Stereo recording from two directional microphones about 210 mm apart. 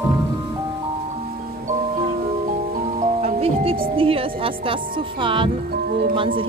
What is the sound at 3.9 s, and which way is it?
Speech, 25° right (ahead or behind).